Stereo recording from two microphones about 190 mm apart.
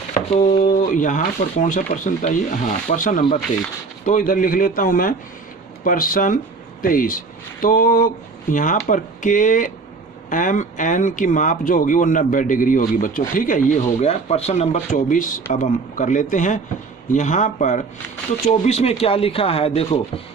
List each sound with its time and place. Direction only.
0.1 s speech: 40° left (ahead or behind)